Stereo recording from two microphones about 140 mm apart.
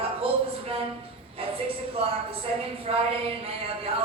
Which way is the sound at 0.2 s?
45° right (ahead or behind).